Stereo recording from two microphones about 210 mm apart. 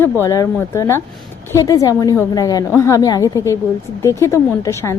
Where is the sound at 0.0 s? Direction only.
15° left (ahead or behind).